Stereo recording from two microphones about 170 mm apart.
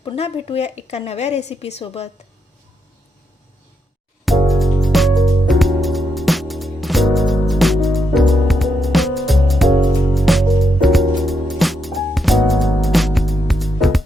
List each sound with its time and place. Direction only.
0.0 s a woman's voice: 30° left (ahead or behind)
4.3 s music: centre (ahead or behind)